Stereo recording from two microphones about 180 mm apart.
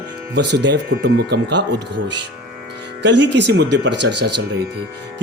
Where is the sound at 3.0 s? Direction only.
75° right (ahead or behind).